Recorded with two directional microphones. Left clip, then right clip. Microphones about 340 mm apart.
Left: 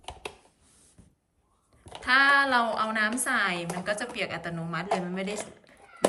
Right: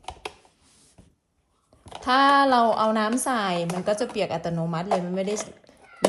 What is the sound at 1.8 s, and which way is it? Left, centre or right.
A woman's voice, centre.